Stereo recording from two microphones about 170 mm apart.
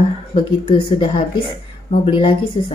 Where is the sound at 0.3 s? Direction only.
30° left (ahead or behind).